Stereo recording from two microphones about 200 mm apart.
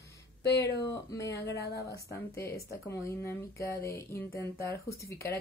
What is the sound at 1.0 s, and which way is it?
Speech, 15° left (ahead or behind).